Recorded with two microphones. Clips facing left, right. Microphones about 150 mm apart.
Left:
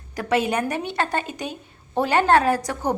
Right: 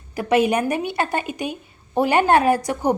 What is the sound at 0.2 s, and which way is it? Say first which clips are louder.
A woman's voice: right 4 dB; 15° right (ahead or behind).